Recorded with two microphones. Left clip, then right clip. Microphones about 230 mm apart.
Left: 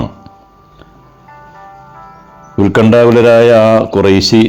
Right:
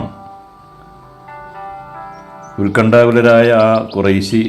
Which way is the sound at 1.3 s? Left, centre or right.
Right.